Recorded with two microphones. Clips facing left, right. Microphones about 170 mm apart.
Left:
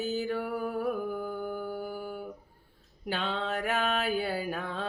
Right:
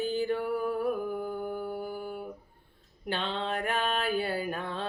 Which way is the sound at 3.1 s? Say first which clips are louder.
Even; 5° left (ahead or behind).